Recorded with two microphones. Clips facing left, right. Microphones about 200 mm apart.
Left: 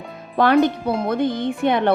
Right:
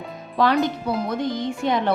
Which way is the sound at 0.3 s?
55° left (ahead or behind).